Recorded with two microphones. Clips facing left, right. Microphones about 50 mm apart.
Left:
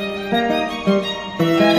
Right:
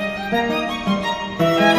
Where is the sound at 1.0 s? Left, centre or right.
Right.